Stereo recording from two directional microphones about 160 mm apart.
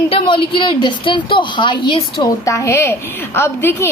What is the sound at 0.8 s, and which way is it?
A woman's voice, 30° left (ahead or behind).